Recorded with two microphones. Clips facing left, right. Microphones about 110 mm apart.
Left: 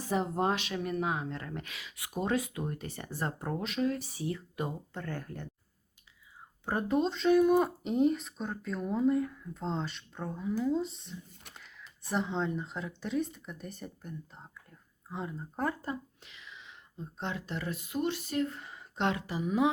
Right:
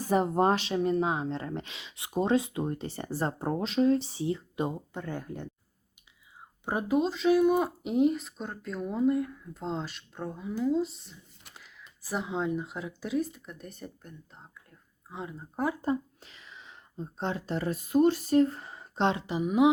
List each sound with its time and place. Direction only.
0.0 s speech: 50° right (ahead or behind)
0.5 s speech: 30° right (ahead or behind)
6.7 s speech: 10° right (ahead or behind)
16.2 s speech: 40° right (ahead or behind); by 19.7 s 15° right (ahead or behind)